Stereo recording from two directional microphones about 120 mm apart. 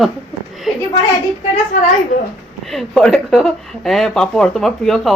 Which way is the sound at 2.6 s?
Centre (ahead or behind).